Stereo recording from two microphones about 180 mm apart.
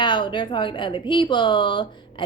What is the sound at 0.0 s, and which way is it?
A woman's voice, 25° left (ahead or behind).